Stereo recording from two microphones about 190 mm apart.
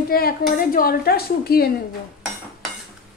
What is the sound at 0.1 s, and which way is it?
A woman's voice, 50° left (ahead or behind).